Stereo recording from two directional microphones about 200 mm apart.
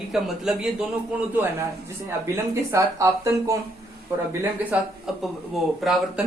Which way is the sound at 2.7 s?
15° right (ahead or behind).